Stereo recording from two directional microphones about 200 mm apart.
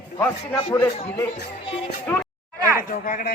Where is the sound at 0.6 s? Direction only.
30° left (ahead or behind).